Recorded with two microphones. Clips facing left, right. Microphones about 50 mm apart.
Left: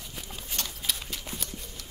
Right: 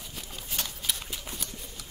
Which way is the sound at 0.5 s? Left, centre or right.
Centre.